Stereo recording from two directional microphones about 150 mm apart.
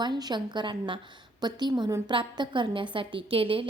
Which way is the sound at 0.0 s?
30° right (ahead or behind).